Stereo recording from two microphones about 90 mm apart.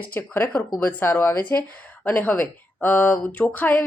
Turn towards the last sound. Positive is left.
turn(degrees=20)  # may be behind; listen again after turning